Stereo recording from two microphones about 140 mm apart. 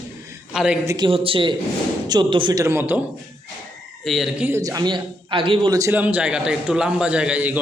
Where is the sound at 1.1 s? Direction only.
40° right (ahead or behind); by 2.9 s 20° right (ahead or behind).